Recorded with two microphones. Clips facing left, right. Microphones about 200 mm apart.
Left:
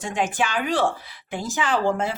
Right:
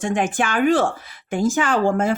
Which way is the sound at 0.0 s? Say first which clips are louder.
Right 4 dB; 50° right (ahead or behind).